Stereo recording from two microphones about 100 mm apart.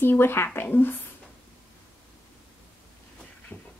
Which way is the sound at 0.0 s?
20° left (ahead or behind).